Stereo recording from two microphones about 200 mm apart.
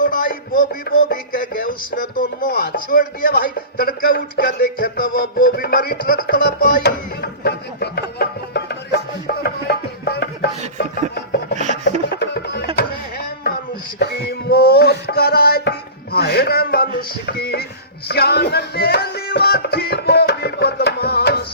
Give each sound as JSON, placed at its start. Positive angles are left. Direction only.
{"t": 0.0, "sound": "music", "side_deg": 45}
{"t": 11.5, "sound": "filing", "side_deg": -35}
{"t": 12.2, "sound": "music", "side_deg": 55}
{"t": 14.0, "sound": "a sound", "side_deg": 50}
{"t": 18.1, "sound": "music", "side_deg": 55}